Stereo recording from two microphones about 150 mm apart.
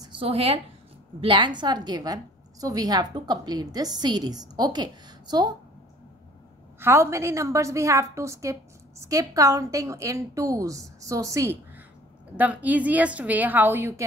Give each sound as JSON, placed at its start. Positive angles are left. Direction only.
{"t": 0.0, "sound": "a woman's voice", "side_deg": -35}
{"t": 6.8, "sound": "a woman's voice", "side_deg": -15}